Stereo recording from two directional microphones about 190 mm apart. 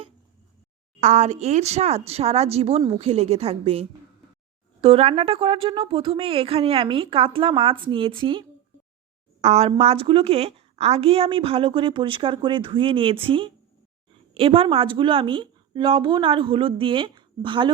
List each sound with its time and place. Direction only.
1.0 s a woman's voice: 40° right (ahead or behind)